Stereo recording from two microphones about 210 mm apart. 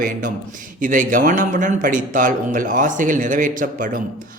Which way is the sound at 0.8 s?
40° right (ahead or behind).